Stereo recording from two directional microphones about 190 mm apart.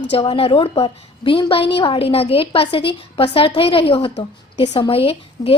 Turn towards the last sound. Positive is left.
turn(degrees=30)  # may be behind; listen again after turning